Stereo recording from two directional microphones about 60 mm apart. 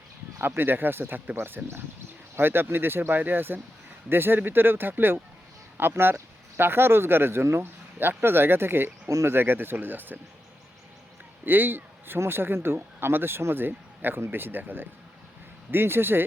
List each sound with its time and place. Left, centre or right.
0.4 s speech: right
11.4 s speech: right